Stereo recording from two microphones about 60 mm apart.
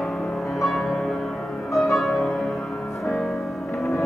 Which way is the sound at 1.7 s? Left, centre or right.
Centre.